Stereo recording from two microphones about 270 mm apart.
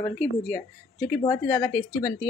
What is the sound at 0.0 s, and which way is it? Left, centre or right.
A woman's voice, centre.